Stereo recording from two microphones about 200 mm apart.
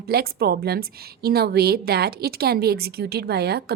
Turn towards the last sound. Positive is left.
turn(degrees=-55)  # may be behind; listen again after turning